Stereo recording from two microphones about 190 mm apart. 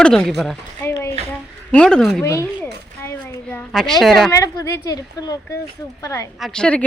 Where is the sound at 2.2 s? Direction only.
15° left (ahead or behind).